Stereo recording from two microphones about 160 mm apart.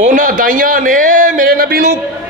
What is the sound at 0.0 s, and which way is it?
A man's voice, 55° right (ahead or behind).